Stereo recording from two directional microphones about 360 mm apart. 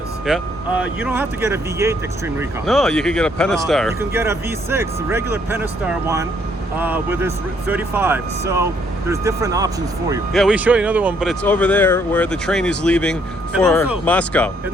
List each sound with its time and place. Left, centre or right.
0.3 s speech: centre